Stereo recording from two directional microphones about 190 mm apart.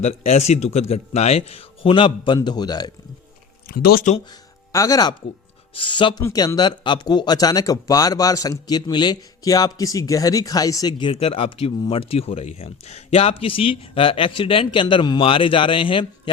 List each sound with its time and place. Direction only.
0.0 s speech: 35° left (ahead or behind)
3.7 s speech: 55° left (ahead or behind)
4.7 s speech: 15° left (ahead or behind)